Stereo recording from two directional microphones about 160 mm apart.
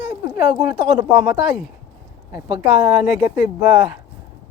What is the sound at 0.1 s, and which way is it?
Speech, 15° right (ahead or behind).